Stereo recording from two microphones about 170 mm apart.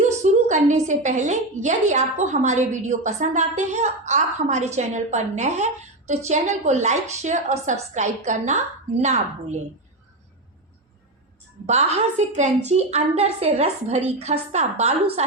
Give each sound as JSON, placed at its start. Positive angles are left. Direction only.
{"t": 0.2, "sound": "a woman's voice", "side_deg": -45}
{"t": 11.6, "sound": "a woman's voice", "side_deg": -40}